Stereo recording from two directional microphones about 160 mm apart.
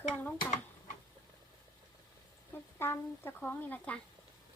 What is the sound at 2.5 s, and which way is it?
Speech, 15° left (ahead or behind).